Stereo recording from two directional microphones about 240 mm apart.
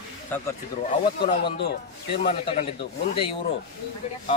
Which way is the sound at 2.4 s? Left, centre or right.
Left.